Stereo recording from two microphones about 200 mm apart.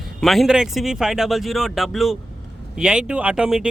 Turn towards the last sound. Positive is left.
turn(degrees=-5)  # may be behind; listen again after turning